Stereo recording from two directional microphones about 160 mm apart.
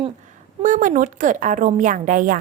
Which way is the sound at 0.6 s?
55° right (ahead or behind).